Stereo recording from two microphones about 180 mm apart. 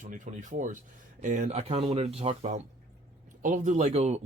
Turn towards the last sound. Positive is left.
turn(degrees=-40)  # may be behind; listen again after turning